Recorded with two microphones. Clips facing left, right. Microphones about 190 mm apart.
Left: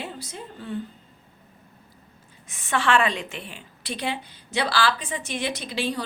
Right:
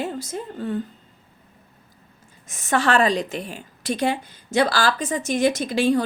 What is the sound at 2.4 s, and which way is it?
A woman's voice, 45° right (ahead or behind).